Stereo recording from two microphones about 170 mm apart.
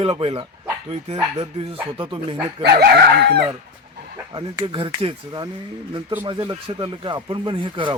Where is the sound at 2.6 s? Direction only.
70° right (ahead or behind).